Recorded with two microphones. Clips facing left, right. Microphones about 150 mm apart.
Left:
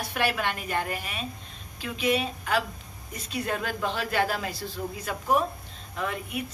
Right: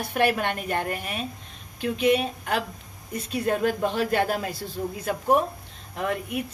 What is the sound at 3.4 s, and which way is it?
A woman's voice, 45° right (ahead or behind).